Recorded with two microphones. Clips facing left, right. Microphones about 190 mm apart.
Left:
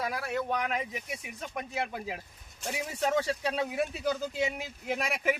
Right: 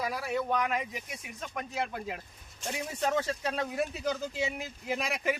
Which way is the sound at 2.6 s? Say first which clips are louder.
Left 1 dB; 5° left (ahead or behind).